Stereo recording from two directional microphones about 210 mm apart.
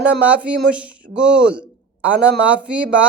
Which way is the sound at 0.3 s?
5° right (ahead or behind).